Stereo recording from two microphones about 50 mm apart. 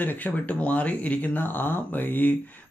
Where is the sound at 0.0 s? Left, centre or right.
Left.